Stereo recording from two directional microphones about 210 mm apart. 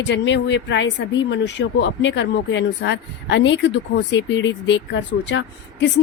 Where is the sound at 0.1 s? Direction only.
60° left (ahead or behind).